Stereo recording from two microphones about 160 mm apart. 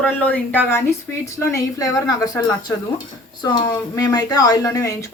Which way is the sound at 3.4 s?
25° left (ahead or behind).